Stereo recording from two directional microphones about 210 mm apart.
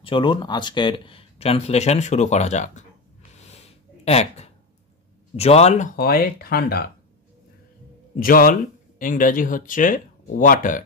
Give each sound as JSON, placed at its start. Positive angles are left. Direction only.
{"t": 0.0, "sound": "speech", "side_deg": 25}
{"t": 8.2, "sound": "speech", "side_deg": 40}